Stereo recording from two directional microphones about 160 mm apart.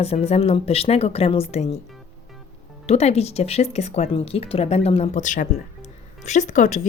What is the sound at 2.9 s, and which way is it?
Speech, 40° left (ahead or behind).